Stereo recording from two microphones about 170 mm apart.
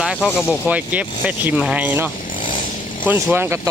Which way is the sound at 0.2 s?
10° left (ahead or behind).